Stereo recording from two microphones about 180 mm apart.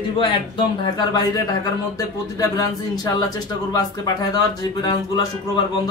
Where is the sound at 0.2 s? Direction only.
30° left (ahead or behind).